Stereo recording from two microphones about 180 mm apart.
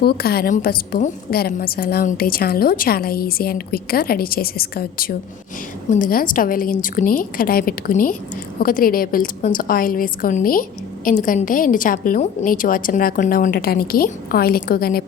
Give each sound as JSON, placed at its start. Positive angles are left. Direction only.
{"t": 0.0, "sound": "a woman's voice", "side_deg": 60}